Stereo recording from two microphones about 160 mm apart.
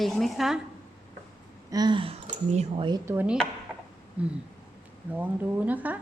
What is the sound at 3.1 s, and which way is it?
Speech, 10° right (ahead or behind).